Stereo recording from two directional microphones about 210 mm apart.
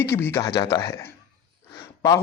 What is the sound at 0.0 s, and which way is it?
A man's voice, 10° left (ahead or behind).